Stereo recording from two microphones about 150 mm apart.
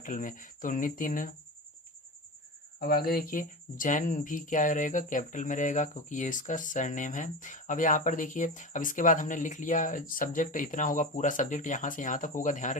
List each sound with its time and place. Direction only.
0.0 s speech: 60° left (ahead or behind)
2.7 s speech: 90° left; by 12.7 s 60° left (ahead or behind)